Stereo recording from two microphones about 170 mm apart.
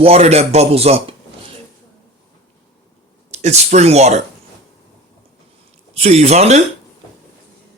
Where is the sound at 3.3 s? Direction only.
40° right (ahead or behind).